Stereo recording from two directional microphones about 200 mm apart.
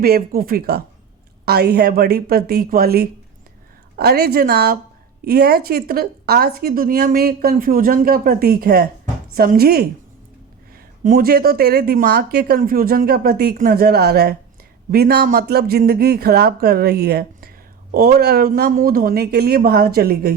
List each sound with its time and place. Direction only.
0.0 s speech: 45° right (ahead or behind)
11.0 s speech: 45° right (ahead or behind)